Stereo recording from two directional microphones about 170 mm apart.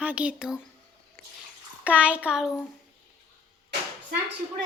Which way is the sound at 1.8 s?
10° right (ahead or behind).